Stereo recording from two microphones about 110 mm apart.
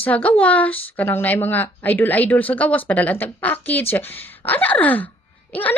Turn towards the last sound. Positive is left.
turn(degrees=15)  # may be behind; listen again after turning